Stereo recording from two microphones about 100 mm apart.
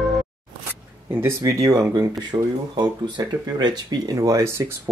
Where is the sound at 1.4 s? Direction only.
35° right (ahead or behind).